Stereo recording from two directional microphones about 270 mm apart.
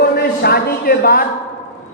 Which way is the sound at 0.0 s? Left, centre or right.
Left.